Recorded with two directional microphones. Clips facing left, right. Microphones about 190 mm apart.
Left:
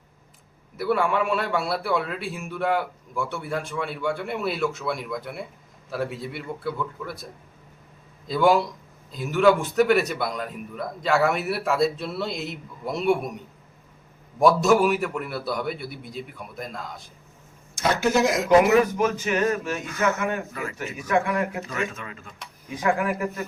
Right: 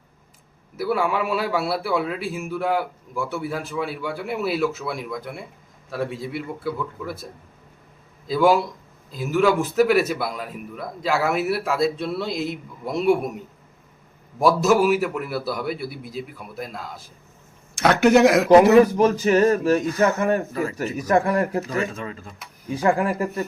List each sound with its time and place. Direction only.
0.8 s a man's voice: 5° right (ahead or behind)
8.3 s a man's voice: centre (ahead or behind)
17.7 s speech: 65° right (ahead or behind)
18.7 s speech: 35° right (ahead or behind)